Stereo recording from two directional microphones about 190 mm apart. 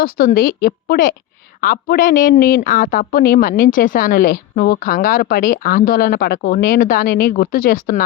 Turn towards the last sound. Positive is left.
turn(degrees=50)  # may be behind; listen again after turning